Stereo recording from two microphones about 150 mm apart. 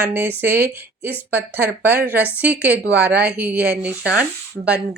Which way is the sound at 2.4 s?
10° right (ahead or behind).